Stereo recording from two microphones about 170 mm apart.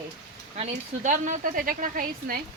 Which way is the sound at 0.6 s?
45° right (ahead or behind).